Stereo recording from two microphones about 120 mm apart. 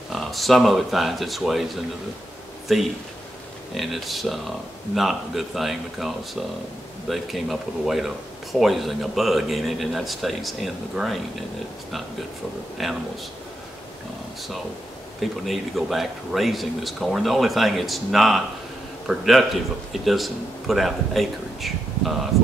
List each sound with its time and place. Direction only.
0.1 s speech: centre (ahead or behind)
2.7 s speech: centre (ahead or behind)
12.8 s speech: centre (ahead or behind)
15.1 s a man's voice: centre (ahead or behind)